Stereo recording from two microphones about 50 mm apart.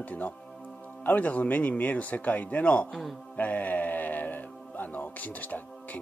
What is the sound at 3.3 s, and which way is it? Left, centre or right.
Music, left.